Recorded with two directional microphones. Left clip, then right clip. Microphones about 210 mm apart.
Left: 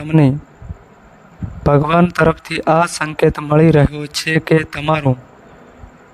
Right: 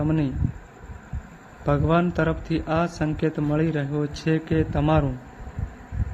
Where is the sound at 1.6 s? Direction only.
50° left (ahead or behind).